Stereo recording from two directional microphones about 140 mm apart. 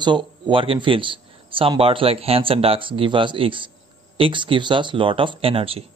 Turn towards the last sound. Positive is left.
turn(degrees=-40)  # may be behind; listen again after turning